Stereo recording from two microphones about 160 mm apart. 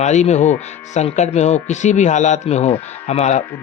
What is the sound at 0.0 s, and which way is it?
Speech, 45° left (ahead or behind).